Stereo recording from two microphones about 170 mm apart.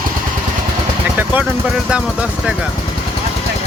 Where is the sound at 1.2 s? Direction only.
5° right (ahead or behind).